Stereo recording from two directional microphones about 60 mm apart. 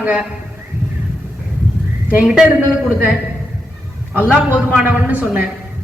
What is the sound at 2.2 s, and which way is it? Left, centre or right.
Speech, centre.